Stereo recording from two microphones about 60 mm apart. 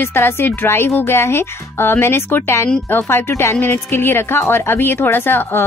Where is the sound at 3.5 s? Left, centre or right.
Left.